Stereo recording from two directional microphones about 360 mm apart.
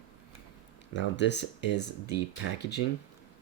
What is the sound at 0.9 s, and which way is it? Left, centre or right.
Speech, left.